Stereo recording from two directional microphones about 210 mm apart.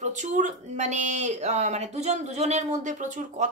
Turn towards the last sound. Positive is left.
turn(degrees=-35)  # may be behind; listen again after turning